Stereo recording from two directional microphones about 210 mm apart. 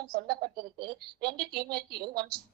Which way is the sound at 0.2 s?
50° right (ahead or behind).